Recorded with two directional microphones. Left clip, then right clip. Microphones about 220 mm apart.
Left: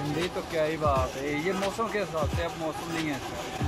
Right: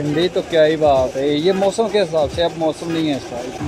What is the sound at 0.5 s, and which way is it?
Speech, 50° right (ahead or behind).